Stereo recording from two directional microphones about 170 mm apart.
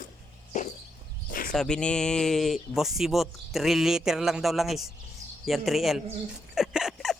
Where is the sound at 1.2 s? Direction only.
55° left (ahead or behind).